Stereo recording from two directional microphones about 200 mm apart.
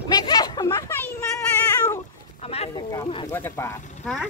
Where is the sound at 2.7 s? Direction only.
20° left (ahead or behind).